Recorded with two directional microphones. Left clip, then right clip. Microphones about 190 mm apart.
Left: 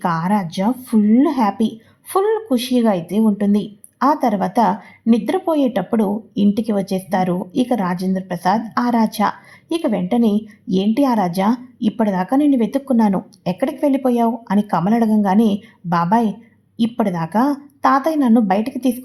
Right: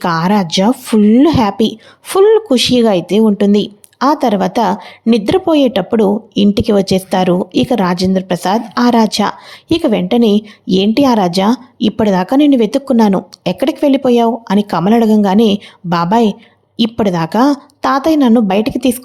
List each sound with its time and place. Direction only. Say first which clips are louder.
0.0 s speech: right 6 dB; 35° right (ahead or behind)